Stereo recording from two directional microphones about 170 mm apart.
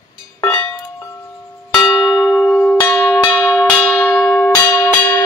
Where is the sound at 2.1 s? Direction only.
15° left (ahead or behind).